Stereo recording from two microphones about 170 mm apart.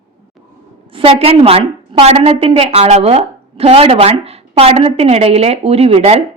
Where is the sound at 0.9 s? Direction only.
35° right (ahead or behind).